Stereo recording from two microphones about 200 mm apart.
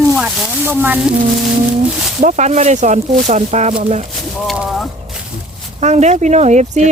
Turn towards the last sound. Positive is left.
turn(degrees=-35)  # may be behind; listen again after turning